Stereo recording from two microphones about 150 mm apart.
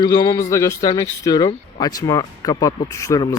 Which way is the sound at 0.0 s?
25° left (ahead or behind).